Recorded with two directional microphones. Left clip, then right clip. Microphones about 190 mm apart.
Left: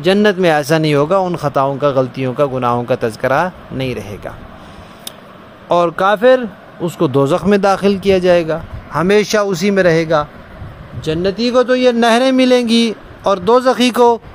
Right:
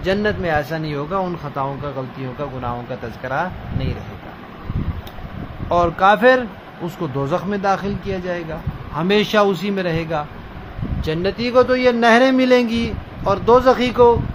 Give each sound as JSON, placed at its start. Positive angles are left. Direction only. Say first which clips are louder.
{"t": 0.0, "sound": "speech", "louder": "left 8 dB", "side_deg": 50}
{"t": 5.7, "sound": "a man's voice", "louder": "left 2 dB", "side_deg": 40}
{"t": 7.0, "sound": "speech", "louder": "left 9 dB", "side_deg": 50}
{"t": 11.0, "sound": "a man's voice", "louder": "left 5 dB", "side_deg": 25}